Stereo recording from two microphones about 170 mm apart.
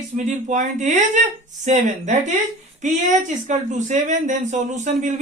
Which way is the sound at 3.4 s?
45° right (ahead or behind).